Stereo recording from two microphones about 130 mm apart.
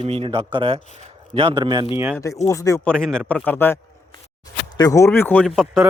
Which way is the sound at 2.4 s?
25° left (ahead or behind).